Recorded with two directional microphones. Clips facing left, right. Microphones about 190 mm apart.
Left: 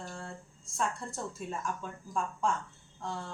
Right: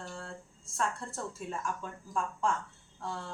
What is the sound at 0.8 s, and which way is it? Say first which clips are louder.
Speech: even; 10° left (ahead or behind).